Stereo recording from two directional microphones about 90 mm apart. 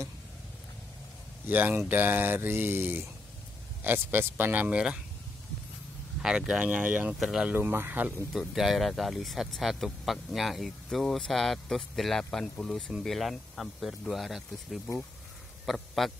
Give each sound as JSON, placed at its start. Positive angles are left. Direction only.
{"t": 1.5, "sound": "speech", "side_deg": -20}
{"t": 6.2, "sound": "speech", "side_deg": -10}
{"t": 7.2, "sound": "speech", "side_deg": -5}
{"t": 7.5, "sound": "speech", "side_deg": -25}
{"t": 8.3, "sound": "speech", "side_deg": -5}